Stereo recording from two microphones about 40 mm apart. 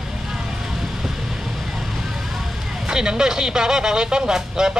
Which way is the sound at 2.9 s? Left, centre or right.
Centre.